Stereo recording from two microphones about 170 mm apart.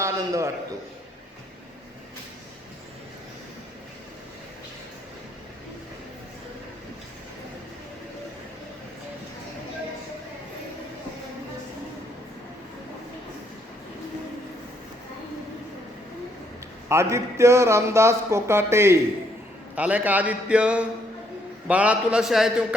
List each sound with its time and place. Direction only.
0.0 s a man's voice: 15° right (ahead or behind)
16.9 s a man's voice: 15° right (ahead or behind)